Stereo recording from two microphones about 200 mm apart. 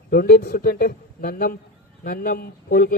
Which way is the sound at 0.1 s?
50° left (ahead or behind).